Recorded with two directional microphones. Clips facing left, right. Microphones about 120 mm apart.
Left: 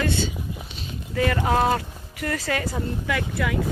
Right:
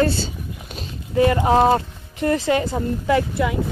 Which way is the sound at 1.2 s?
25° right (ahead or behind).